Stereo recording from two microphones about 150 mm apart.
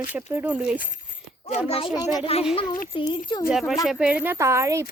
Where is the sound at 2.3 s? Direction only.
40° left (ahead or behind).